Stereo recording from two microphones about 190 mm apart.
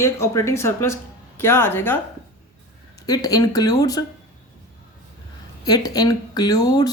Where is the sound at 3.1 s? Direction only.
20° left (ahead or behind).